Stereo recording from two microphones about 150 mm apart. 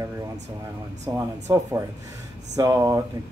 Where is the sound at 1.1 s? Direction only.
20° right (ahead or behind).